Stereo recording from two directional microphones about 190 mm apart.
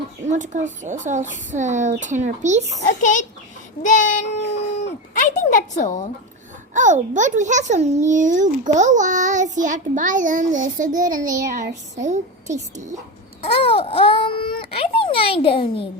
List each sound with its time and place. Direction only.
0.3 s a child's voice: 40° right (ahead or behind)
2.8 s a sound: 40° left (ahead or behind)
4.4 s a sound: 35° left (ahead or behind)
5.1 s speech: 45° left (ahead or behind)
6.7 s a child's voice: 40° right (ahead or behind)
13.4 s a child's voice: 30° left (ahead or behind)